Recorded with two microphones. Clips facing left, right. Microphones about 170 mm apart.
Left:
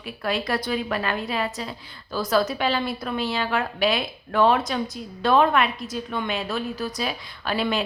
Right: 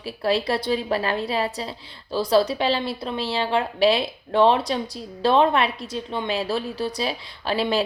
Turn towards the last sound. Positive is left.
turn(degrees=-30)  # may be behind; listen again after turning